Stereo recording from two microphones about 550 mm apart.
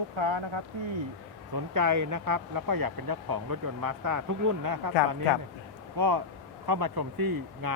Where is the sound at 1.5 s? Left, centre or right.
Right.